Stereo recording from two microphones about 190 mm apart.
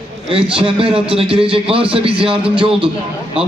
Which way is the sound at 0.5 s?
30° right (ahead or behind).